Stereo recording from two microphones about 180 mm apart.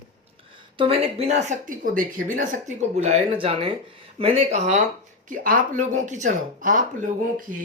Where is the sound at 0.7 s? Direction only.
30° right (ahead or behind); by 7.1 s 45° right (ahead or behind).